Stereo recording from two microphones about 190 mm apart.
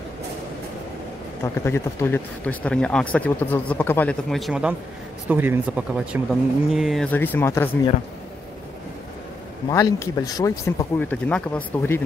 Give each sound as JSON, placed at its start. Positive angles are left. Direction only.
{"t": 1.4, "sound": "speech", "side_deg": 15}
{"t": 9.7, "sound": "speech", "side_deg": 20}